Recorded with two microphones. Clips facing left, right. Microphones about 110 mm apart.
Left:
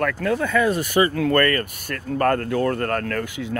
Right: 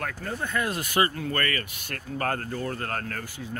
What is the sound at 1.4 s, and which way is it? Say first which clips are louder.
Speech: left 10 dB; 50° left (ahead or behind).